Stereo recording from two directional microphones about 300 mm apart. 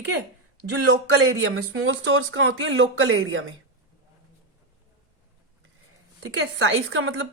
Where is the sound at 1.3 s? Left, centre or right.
Right.